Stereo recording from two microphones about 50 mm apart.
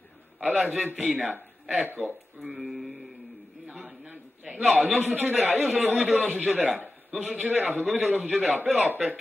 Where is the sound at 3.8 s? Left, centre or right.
Right.